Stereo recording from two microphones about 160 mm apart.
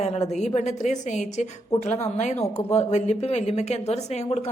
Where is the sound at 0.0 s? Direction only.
45° left (ahead or behind).